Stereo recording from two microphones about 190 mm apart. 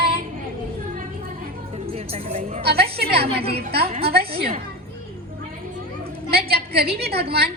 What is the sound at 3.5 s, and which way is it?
Speech, 55° right (ahead or behind).